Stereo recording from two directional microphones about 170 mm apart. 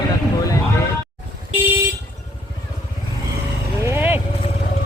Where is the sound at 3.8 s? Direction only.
15° right (ahead or behind).